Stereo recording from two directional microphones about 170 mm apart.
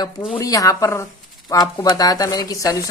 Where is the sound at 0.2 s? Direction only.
15° left (ahead or behind).